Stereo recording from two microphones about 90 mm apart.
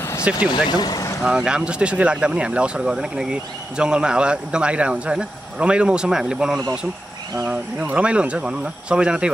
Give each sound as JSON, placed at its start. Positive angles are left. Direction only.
{"t": 0.2, "sound": "speech", "side_deg": -10}
{"t": 0.7, "sound": "speech", "side_deg": 50}
{"t": 1.2, "sound": "speech", "side_deg": -5}